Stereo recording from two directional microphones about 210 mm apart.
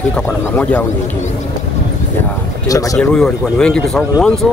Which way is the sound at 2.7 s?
15° left (ahead or behind).